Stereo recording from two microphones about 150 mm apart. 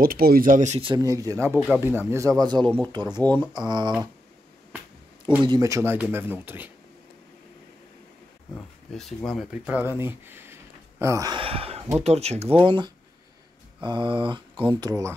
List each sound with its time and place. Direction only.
0.0 s speech: 80° right; by 0.7 s 60° right (ahead or behind)
0.7 s speech: 35° right (ahead or behind)
1.0 s speech: 25° right (ahead or behind)
2.6 s speech: 10° left (ahead or behind)
2.9 s speech: 30° right (ahead or behind)
5.4 s speech: 25° right (ahead or behind)
8.9 s speech: centre (ahead or behind); by 11.3 s 20° right (ahead or behind)
11.3 s speech: 40° right (ahead or behind)
12.6 s speech: 35° right (ahead or behind)